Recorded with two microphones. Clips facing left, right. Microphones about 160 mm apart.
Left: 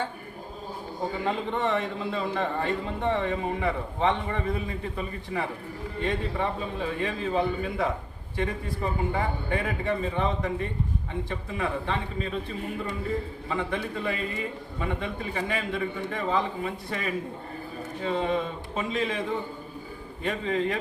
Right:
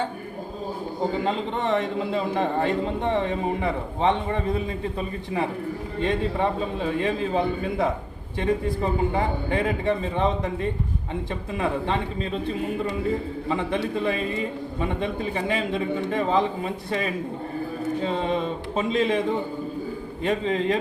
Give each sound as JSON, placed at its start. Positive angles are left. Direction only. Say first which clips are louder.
{"t": 1.2, "sound": "a man's voice", "louder": "right 2 dB", "side_deg": -25}
{"t": 11.3, "sound": "a man's voice", "louder": "right 5 dB", "side_deg": -25}
{"t": 14.8, "sound": "a man's voice", "louder": "right 4 dB", "side_deg": -25}
{"t": 18.8, "sound": "a man's voice", "louder": "right 6 dB", "side_deg": -25}
{"t": 20.2, "sound": "a man's voice", "louder": "right 4 dB", "side_deg": -25}